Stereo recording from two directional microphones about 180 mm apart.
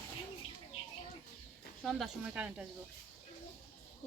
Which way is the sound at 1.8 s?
Centre (ahead or behind).